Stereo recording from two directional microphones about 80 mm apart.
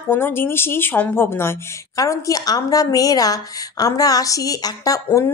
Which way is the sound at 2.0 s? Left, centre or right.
Left.